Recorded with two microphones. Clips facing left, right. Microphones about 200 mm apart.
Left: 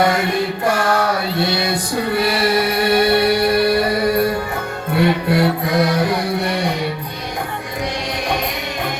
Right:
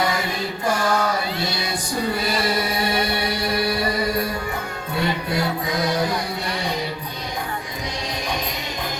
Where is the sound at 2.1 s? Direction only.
65° left (ahead or behind).